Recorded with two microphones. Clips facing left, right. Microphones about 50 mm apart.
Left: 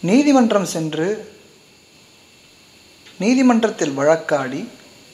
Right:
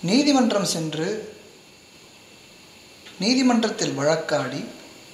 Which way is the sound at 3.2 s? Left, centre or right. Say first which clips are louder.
Left 5 dB; left.